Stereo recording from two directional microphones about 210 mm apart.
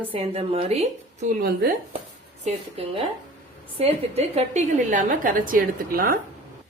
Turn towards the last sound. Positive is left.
turn(degrees=-40)  # may be behind; listen again after turning